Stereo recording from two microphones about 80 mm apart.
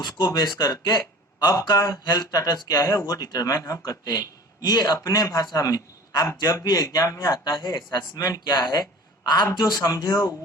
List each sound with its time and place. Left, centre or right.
0.3 s a man's voice: left
2.0 s a man's voice: left